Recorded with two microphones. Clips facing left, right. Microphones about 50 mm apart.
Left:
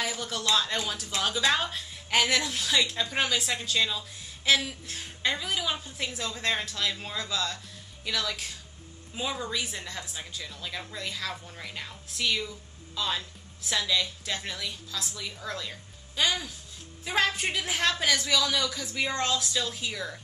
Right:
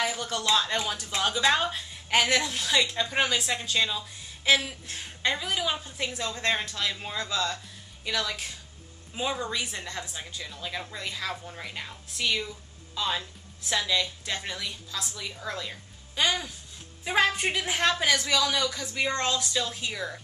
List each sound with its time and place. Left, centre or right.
0.0 s a woman's voice: centre